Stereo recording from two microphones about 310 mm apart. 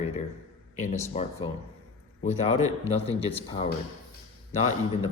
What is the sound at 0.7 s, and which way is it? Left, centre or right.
Speech, left.